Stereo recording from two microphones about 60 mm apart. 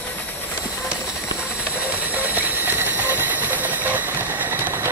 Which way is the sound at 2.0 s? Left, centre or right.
Right.